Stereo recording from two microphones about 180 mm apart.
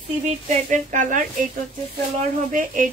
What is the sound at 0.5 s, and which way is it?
Speech, 45° right (ahead or behind).